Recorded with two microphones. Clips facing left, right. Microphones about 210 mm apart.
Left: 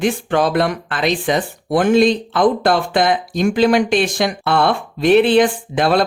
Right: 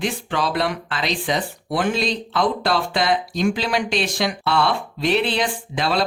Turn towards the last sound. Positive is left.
turn(degrees=50)  # may be behind; listen again after turning